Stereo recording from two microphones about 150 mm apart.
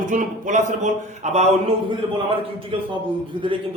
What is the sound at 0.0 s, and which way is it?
Speech, 60° right (ahead or behind).